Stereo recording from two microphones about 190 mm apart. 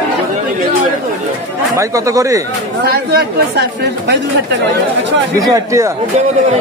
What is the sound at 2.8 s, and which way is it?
Speech, 55° right (ahead or behind).